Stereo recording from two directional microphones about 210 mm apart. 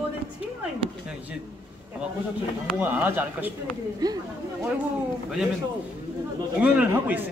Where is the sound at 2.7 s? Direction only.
10° right (ahead or behind).